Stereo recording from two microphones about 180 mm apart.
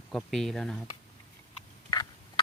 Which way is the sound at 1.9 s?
20° left (ahead or behind).